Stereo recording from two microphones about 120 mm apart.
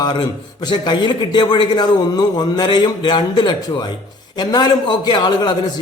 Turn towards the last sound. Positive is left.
turn(degrees=40)  # may be behind; listen again after turning